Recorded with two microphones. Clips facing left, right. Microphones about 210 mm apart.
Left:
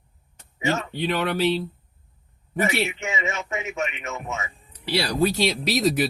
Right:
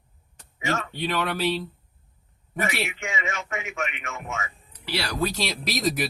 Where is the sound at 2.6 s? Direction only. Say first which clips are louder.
Left 4 dB; 25° left (ahead or behind).